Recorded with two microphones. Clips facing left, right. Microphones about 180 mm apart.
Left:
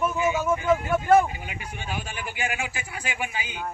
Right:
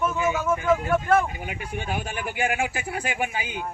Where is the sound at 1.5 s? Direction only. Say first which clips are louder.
Right 4 dB; 50° right (ahead or behind).